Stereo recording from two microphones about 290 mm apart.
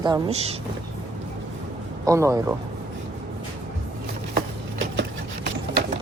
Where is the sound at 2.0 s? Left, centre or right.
Centre.